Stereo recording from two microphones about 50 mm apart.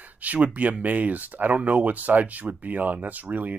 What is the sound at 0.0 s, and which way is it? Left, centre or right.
Speech, right.